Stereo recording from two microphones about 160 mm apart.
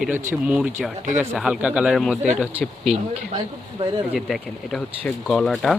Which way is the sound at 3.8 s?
35° right (ahead or behind).